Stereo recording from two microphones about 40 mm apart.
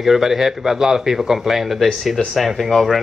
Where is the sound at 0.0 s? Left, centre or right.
Centre.